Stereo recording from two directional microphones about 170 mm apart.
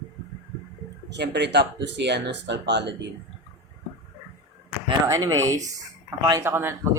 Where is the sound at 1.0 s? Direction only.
90° right.